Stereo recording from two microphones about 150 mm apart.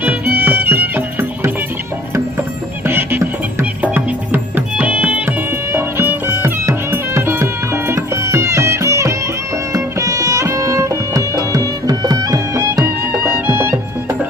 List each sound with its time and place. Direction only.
0.0 s music: 15° right (ahead or behind)
2.8 s music: 15° right (ahead or behind)